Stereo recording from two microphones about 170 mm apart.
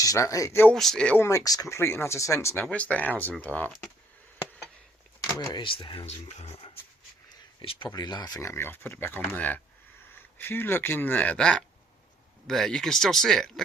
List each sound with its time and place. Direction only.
0.0 s speech: 20° left (ahead or behind); by 1.1 s centre (ahead or behind)
1.2 s speech: 20° left (ahead or behind)
5.4 s speech: 25° left (ahead or behind); by 13.5 s centre (ahead or behind)